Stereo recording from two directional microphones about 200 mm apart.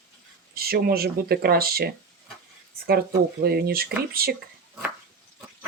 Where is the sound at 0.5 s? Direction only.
50° right (ahead or behind).